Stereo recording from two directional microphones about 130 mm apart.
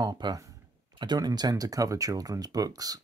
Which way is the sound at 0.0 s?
30° right (ahead or behind).